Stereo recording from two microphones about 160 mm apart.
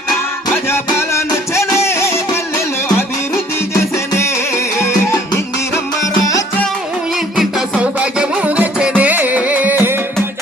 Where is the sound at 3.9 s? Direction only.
15° left (ahead or behind).